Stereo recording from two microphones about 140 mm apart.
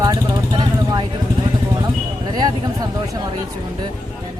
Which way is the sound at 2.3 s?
30° right (ahead or behind).